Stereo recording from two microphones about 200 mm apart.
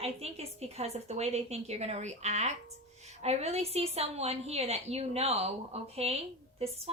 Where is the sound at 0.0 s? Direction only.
30° right (ahead or behind).